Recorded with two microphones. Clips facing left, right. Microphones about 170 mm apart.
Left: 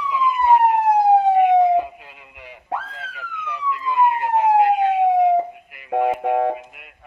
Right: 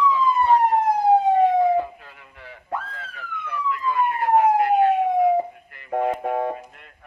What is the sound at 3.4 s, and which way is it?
Police car, 20° left (ahead or behind).